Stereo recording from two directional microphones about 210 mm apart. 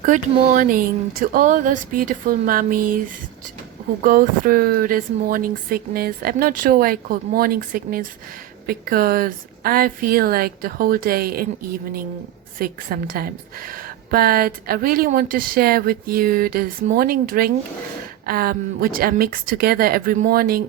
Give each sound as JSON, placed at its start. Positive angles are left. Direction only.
{"t": 0.0, "sound": "speech", "side_deg": -40}
{"t": 4.0, "sound": "a woman's voice", "side_deg": -40}
{"t": 12.5, "sound": "a woman's voice", "side_deg": -45}